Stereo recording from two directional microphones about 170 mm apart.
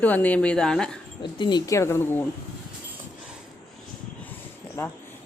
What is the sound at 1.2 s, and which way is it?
Speech, 25° left (ahead or behind).